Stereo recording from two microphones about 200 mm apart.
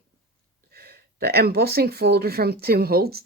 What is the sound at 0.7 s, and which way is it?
Speech, 50° right (ahead or behind).